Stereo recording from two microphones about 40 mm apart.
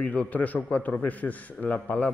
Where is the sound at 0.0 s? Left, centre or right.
Left.